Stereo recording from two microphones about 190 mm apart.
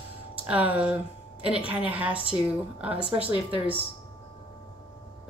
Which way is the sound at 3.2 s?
10° right (ahead or behind).